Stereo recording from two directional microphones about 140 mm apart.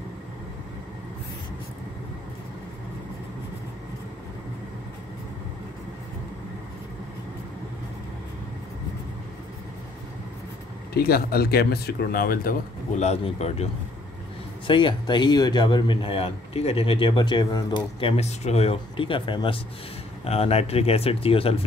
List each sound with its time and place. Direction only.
11.0 s speech: 90° left
13.0 s speech: 50° left (ahead or behind)
14.7 s speech: 35° left (ahead or behind)